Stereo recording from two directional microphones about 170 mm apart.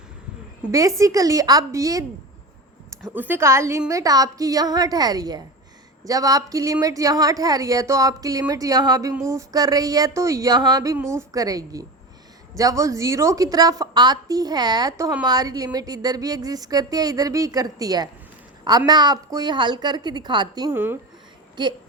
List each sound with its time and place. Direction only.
0.7 s a woman's voice: 20° right (ahead or behind)
3.1 s a woman's voice: 10° right (ahead or behind)
20.7 s a woman's voice: 10° right (ahead or behind)
21.6 s a woman's voice: 25° right (ahead or behind)